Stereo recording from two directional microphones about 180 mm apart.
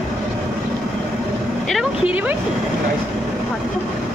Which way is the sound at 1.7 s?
5° right (ahead or behind).